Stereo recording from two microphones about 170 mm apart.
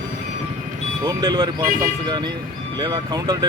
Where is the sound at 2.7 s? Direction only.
25° right (ahead or behind).